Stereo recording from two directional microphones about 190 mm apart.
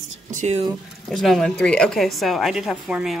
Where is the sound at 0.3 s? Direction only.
40° right (ahead or behind).